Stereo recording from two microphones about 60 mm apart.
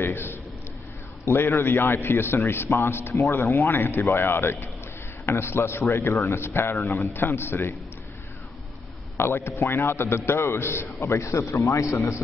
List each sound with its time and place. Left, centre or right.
0.0 s a sound: left
1.2 s a man's voice: left
9.1 s a man's voice: left
11.0 s speech: left